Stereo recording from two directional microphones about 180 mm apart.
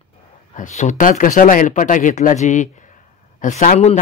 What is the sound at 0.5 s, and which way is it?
A man's voice, 45° left (ahead or behind).